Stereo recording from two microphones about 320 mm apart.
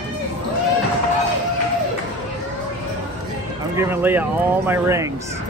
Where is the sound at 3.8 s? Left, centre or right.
Centre.